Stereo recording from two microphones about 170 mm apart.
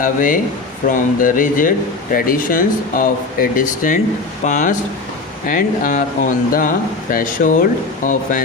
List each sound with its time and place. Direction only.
0.0 s speech: 55° left (ahead or behind)